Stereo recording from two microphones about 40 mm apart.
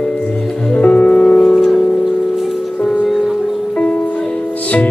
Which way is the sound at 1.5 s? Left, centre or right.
Centre.